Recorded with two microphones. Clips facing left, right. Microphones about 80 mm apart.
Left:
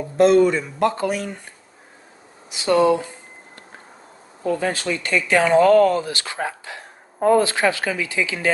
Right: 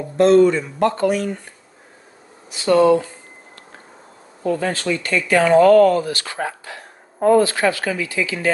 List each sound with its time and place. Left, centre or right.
0.2 s speech: centre
2.5 s speech: centre
4.6 s speech: left